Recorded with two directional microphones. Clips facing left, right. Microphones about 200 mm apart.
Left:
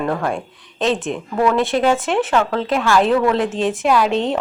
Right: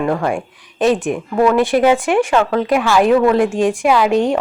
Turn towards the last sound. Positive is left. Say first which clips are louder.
# right 4 dB
turn(degrees=-45)  # may be behind; listen again after turning